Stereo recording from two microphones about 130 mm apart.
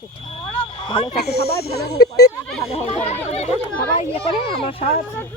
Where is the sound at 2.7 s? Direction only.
55° left (ahead or behind).